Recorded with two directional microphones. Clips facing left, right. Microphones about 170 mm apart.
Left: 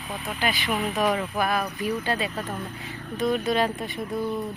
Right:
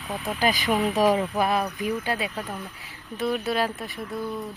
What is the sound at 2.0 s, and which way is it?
Speech, 10° right (ahead or behind).